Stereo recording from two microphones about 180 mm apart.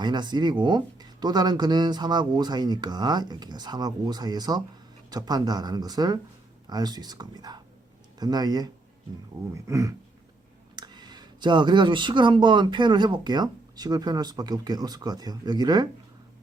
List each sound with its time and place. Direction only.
0.0 s speech: 25° right (ahead or behind)